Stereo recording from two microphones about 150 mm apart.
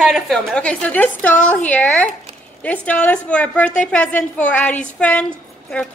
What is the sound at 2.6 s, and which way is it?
A woman's voice, 10° left (ahead or behind).